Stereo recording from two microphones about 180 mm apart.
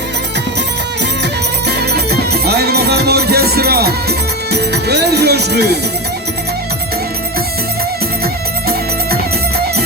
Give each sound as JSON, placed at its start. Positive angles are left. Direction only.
{"t": 1.2, "sound": "music", "side_deg": -65}
{"t": 4.5, "sound": "speech", "side_deg": -65}
{"t": 8.2, "sound": "music", "side_deg": -60}